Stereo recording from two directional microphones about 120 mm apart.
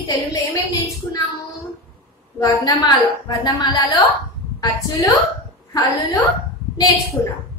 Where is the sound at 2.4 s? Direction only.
30° left (ahead or behind).